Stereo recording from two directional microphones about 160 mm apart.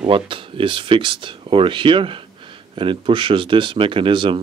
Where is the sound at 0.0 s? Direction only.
35° right (ahead or behind).